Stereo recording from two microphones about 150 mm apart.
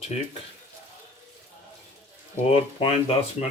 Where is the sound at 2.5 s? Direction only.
40° left (ahead or behind).